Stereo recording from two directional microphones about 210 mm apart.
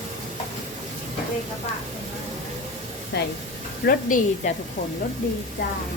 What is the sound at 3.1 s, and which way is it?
Speech, 55° left (ahead or behind).